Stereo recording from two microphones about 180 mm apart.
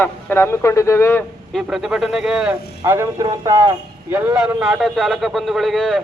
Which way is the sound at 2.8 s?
20° right (ahead or behind).